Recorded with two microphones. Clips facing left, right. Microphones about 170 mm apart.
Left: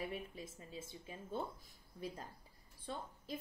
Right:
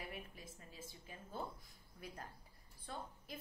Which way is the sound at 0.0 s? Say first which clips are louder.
Left 6 dB; 25° left (ahead or behind).